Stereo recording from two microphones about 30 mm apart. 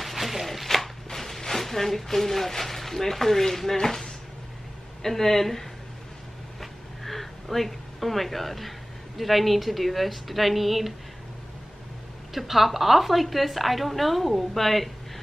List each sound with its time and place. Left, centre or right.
0.0 s chopping: centre
1.1 s speech: centre
12.4 s a woman's voice: centre